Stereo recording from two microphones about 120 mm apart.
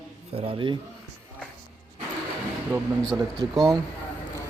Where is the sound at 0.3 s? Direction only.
45° right (ahead or behind).